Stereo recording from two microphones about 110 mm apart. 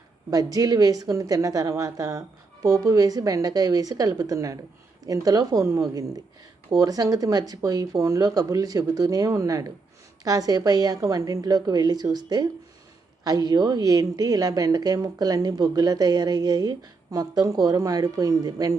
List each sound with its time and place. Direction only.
0.3 s a woman's voice: 35° right (ahead or behind)